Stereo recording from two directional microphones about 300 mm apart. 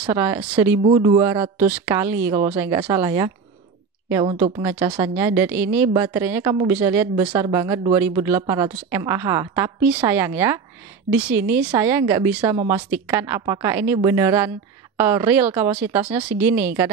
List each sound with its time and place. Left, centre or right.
0.0 s speech: centre